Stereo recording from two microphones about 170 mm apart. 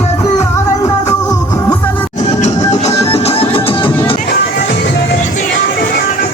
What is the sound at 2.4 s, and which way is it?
Music, 40° left (ahead or behind).